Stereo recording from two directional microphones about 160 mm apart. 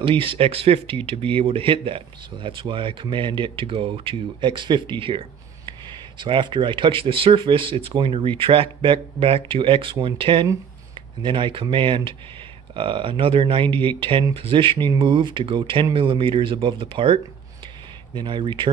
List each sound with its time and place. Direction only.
0.0 s speech: 35° right (ahead or behind)